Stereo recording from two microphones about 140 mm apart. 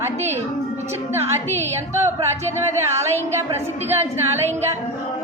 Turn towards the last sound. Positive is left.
turn(degrees=-15)  # may be behind; listen again after turning